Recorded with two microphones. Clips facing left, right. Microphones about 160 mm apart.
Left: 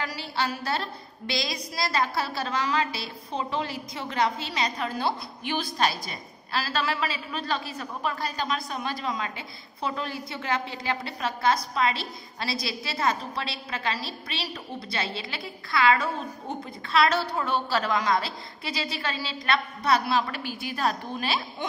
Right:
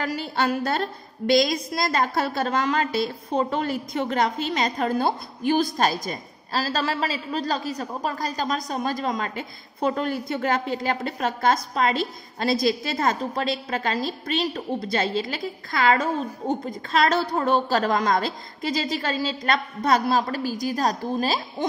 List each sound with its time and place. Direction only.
0.0 s a woman's voice: 45° right (ahead or behind)